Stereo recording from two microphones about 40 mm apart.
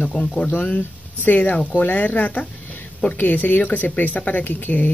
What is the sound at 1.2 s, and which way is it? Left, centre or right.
Speech, left.